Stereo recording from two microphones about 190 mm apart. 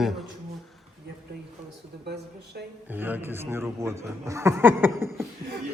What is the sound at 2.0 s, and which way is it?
Speech, 60° right (ahead or behind).